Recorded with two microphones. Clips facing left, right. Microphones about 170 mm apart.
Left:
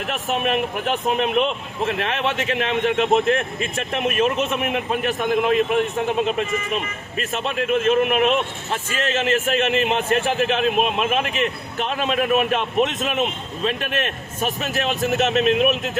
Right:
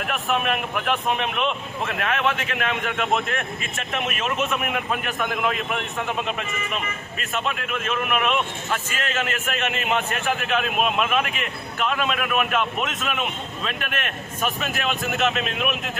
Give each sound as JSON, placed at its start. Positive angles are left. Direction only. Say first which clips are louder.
{"t": 0.1, "sound": "speech", "louder": "left 2 dB", "side_deg": 35}